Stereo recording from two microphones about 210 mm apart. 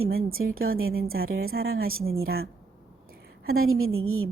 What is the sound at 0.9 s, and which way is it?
A woman's voice, 45° right (ahead or behind).